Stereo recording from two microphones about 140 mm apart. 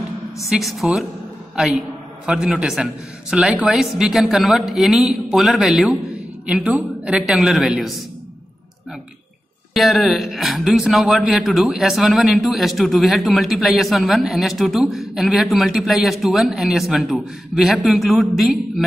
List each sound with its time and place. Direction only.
0.5 s speech: centre (ahead or behind)
9.8 s speech: centre (ahead or behind)